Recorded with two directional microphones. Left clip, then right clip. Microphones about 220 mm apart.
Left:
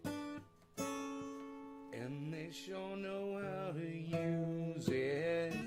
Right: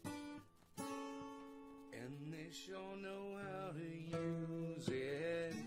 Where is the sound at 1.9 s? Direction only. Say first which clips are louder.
Left 6 dB; 25° left (ahead or behind).